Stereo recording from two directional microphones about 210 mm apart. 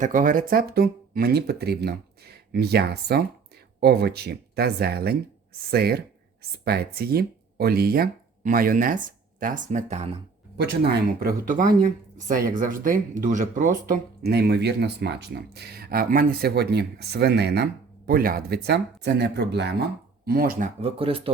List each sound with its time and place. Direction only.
0.0 s speech: 40° right (ahead or behind)
11.2 s speech: 40° right (ahead or behind)
20.8 s speech: 25° right (ahead or behind)